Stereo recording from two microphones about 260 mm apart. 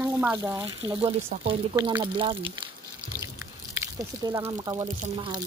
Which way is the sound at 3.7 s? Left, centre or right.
Centre.